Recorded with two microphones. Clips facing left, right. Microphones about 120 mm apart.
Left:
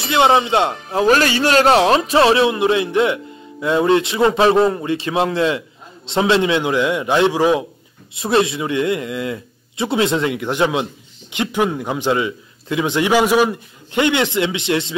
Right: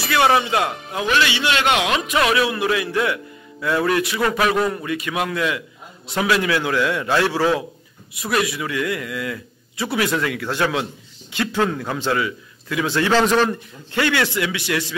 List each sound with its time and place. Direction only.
0.0 s a man's voice: 25° left (ahead or behind)